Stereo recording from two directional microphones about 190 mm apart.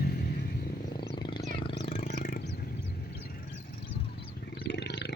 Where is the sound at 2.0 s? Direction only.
45° left (ahead or behind).